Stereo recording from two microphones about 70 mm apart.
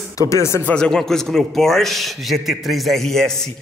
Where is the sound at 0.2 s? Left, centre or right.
Left.